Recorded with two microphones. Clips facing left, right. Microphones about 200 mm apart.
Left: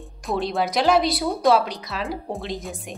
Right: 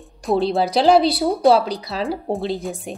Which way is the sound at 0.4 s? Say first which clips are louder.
Right 4 dB; 30° right (ahead or behind).